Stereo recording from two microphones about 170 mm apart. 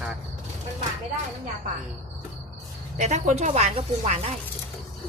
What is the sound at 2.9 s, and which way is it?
Speech, 45° right (ahead or behind).